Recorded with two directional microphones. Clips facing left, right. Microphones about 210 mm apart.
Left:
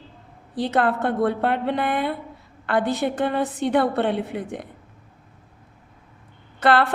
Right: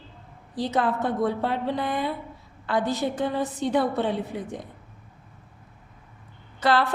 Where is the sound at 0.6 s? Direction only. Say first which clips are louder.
Left 3 dB; 65° left (ahead or behind).